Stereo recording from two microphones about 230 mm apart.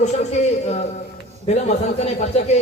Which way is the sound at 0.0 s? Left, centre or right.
Left.